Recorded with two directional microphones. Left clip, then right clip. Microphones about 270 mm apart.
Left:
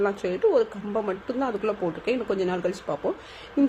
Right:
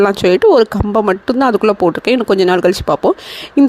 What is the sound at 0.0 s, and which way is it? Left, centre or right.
Speech, right.